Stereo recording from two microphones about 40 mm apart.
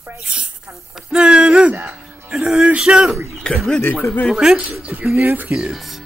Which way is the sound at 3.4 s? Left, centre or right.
Left.